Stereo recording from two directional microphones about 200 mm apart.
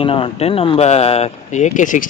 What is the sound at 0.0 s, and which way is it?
Speech, 25° left (ahead or behind).